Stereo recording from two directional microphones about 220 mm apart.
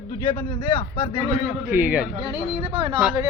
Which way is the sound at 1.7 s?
5° right (ahead or behind).